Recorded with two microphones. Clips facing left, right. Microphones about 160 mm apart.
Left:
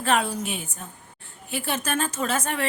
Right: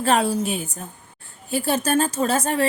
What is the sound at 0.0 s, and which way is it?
A woman's voice, 35° right (ahead or behind).